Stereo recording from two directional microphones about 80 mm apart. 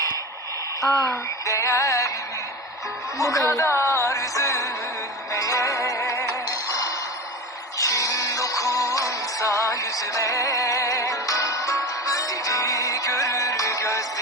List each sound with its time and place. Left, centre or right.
1.0 s music: left
3.2 s music: left